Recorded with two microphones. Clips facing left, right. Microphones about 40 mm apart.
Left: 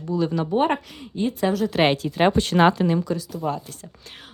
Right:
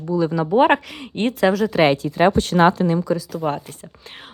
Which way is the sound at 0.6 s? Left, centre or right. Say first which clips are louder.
Right 6 dB; right.